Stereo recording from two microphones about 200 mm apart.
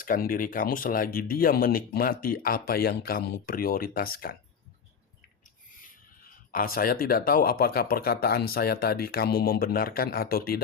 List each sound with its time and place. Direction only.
0.0 s speech: 45° left (ahead or behind)
6.5 s speech: 45° left (ahead or behind)